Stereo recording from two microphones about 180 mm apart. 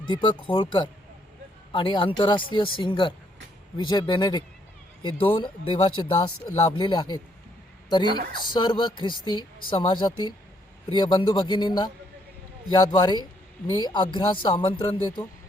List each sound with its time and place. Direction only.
0.0 s speech: 25° left (ahead or behind)